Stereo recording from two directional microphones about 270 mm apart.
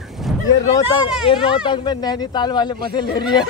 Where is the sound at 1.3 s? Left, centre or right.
Centre.